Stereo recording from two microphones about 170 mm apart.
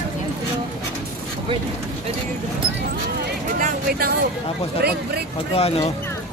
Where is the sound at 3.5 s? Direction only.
60° right (ahead or behind).